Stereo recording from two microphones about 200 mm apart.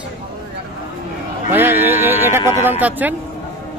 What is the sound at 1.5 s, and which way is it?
Speech, 10° right (ahead or behind).